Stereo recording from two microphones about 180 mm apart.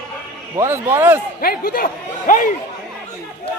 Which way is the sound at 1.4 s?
55° left (ahead or behind).